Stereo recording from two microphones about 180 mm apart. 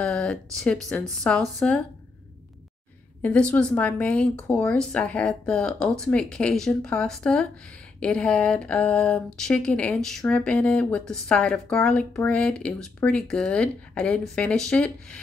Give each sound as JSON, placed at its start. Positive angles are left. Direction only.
{"t": 0.0, "sound": "speech", "side_deg": 5}
{"t": 3.2, "sound": "speech", "side_deg": 5}